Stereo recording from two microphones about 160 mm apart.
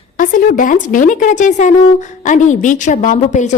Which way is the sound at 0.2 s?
55° left (ahead or behind).